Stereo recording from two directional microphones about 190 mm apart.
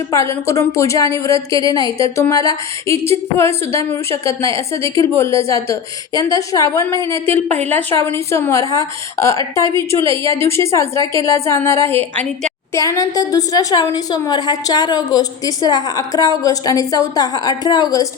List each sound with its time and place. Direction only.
0.1 s a woman's voice: 15° left (ahead or behind)
7.5 s a woman's voice: 35° right (ahead or behind)
8.1 s a woman's voice: 15° left (ahead or behind)